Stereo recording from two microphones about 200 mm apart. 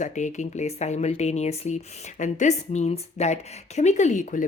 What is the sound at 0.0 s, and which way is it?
Speech, 35° left (ahead or behind).